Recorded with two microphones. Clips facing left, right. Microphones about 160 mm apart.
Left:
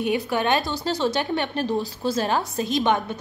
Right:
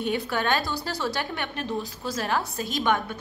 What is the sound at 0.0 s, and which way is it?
A woman's voice, 15° left (ahead or behind).